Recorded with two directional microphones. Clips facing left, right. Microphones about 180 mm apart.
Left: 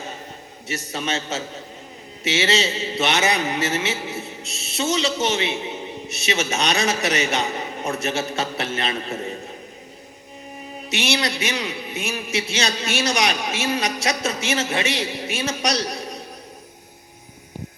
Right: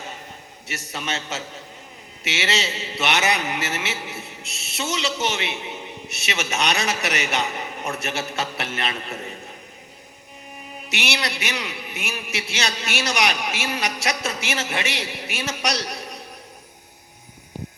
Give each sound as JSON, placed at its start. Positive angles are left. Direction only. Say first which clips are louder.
{"t": 0.9, "sound": "a man's voice", "louder": "left 3 dB", "side_deg": 25}
{"t": 10.8, "sound": "a man's voice", "louder": "left 4 dB", "side_deg": 20}